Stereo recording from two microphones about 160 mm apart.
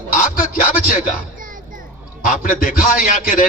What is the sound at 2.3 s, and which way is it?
A man's voice, 60° left (ahead or behind).